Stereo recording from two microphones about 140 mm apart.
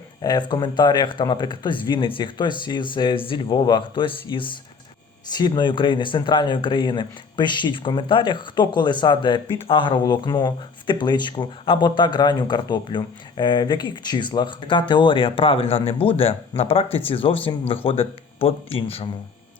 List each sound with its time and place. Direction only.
0.2 s speech: 30° left (ahead or behind)